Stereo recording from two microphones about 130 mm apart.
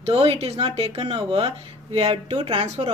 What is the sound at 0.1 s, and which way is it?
Speech, 45° right (ahead or behind).